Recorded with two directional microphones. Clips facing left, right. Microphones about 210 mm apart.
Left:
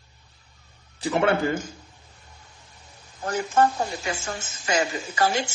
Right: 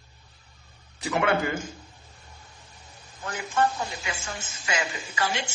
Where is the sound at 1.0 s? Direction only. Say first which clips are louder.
Left 3 dB; 30° left (ahead or behind).